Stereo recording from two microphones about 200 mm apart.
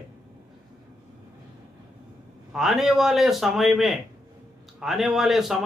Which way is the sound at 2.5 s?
Centre (ahead or behind).